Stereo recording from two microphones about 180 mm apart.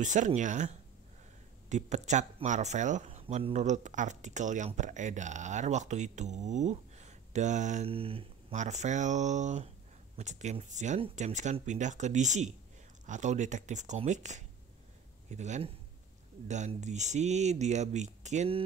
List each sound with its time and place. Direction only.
0.0 s speech: 45° right (ahead or behind)